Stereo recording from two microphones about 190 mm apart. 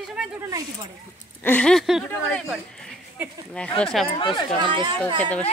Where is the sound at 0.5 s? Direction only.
20° right (ahead or behind).